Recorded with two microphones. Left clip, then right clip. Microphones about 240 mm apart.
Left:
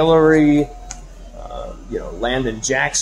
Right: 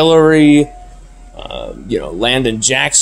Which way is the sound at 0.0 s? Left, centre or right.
Right.